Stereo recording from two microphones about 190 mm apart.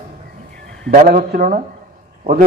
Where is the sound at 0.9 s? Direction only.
45° right (ahead or behind).